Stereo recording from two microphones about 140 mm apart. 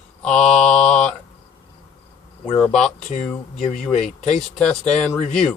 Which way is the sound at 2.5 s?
5° left (ahead or behind).